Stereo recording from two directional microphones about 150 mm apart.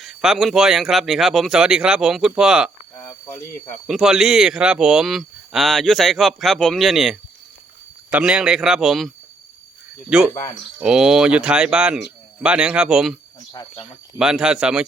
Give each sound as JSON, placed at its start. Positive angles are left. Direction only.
{"t": 0.0, "sound": "speech", "side_deg": 0}
{"t": 3.8, "sound": "speech", "side_deg": -5}
{"t": 13.5, "sound": "speech", "side_deg": 25}
{"t": 14.2, "sound": "speech", "side_deg": -5}